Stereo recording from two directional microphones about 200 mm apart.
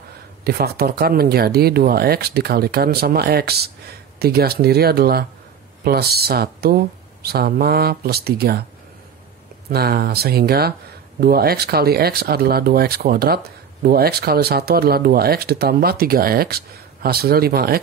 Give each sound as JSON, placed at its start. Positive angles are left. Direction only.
{"t": 0.4, "sound": "speech", "side_deg": -50}
{"t": 9.7, "sound": "speech", "side_deg": -50}